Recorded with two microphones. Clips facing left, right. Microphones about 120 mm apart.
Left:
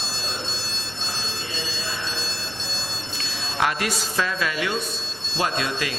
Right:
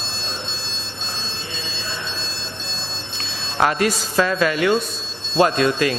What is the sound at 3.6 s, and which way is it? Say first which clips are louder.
A man's voice: right 6 dB; 40° right (ahead or behind).